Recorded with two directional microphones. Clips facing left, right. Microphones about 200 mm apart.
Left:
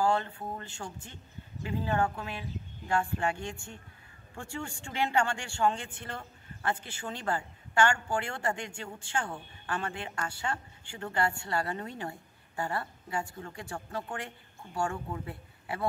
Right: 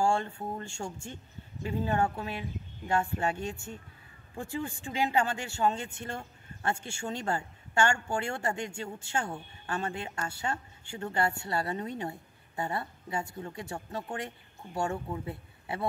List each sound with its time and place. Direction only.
0.0 s a woman's voice: 25° right (ahead or behind)
4.4 s a man's voice: 20° right (ahead or behind)